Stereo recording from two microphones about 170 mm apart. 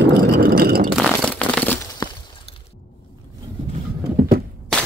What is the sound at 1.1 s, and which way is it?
Crumpling, 10° left (ahead or behind).